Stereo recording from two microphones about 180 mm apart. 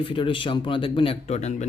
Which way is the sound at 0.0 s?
30° left (ahead or behind).